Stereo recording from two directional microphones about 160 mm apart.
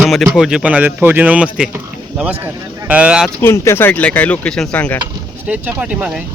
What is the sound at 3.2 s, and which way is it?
Speech, 15° left (ahead or behind).